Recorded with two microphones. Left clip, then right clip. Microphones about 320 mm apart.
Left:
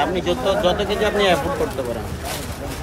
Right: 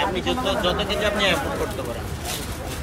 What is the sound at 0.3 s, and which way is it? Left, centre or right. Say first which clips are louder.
Speech: left 4 dB; centre.